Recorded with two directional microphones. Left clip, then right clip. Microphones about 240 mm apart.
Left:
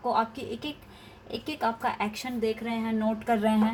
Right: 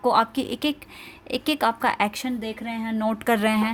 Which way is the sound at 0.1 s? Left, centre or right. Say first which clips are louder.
Right 5 dB; right.